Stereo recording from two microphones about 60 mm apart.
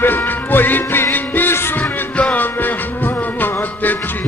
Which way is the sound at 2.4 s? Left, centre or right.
Left.